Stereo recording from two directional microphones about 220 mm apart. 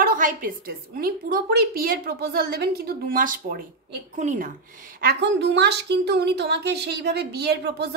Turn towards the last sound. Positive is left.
turn(degrees=-50)  # may be behind; listen again after turning